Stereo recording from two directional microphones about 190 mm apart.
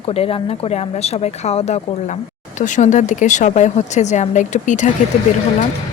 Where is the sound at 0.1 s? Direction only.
30° left (ahead or behind).